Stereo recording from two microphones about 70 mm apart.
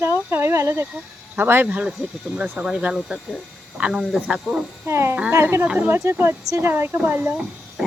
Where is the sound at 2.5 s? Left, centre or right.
Centre.